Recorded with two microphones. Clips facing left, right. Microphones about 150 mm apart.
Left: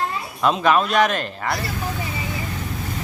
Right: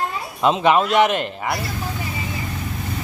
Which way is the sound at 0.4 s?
20° right (ahead or behind).